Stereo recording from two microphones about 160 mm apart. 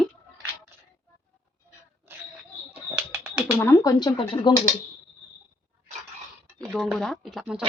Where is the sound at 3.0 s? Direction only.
5° right (ahead or behind).